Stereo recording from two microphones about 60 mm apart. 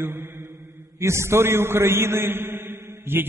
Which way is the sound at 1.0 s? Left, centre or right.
Right.